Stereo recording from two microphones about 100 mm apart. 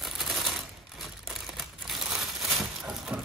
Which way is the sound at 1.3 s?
5° right (ahead or behind).